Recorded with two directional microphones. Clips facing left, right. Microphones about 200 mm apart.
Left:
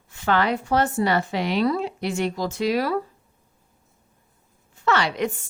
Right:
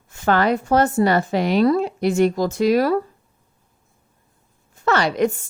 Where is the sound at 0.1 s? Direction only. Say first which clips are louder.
Right 4 dB; 45° right (ahead or behind).